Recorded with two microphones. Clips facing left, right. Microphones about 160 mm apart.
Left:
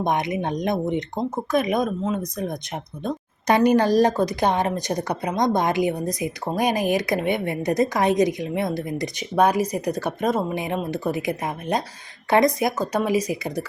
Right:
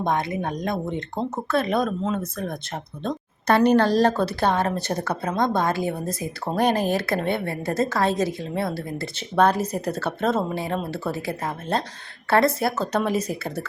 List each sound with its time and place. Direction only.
0.0 s speech: 20° left (ahead or behind)